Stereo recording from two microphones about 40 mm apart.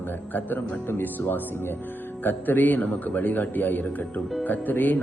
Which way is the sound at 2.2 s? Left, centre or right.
Left.